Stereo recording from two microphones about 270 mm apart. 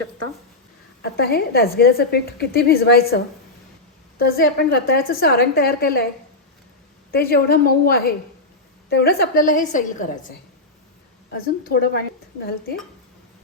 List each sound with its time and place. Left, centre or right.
1.0 s a woman's voice: left
4.2 s a woman's voice: left
7.1 s a woman's voice: left
11.3 s a woman's voice: left